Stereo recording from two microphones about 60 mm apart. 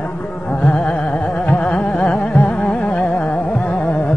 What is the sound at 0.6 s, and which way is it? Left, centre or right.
Carnatic music, centre.